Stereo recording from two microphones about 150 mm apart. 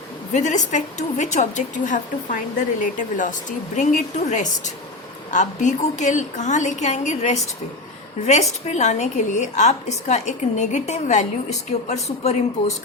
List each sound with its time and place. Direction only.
0.3 s a woman's voice: 55° left (ahead or behind)